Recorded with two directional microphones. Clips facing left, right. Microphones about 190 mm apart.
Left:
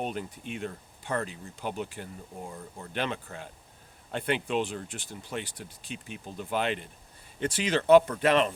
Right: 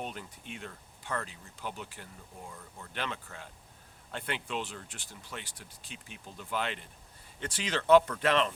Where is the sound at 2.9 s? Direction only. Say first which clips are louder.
Left 6 dB; 20° left (ahead or behind).